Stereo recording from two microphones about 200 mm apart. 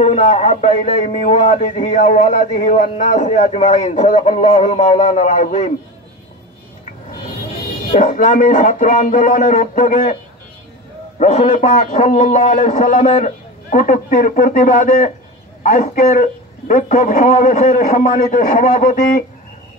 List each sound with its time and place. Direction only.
0.0 s speech: 35° left (ahead or behind)
7.9 s speech: 40° left (ahead or behind)
11.1 s speech: 35° left (ahead or behind)